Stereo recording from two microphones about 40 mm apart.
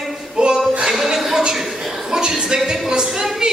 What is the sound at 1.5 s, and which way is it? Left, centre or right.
Chuckle, centre.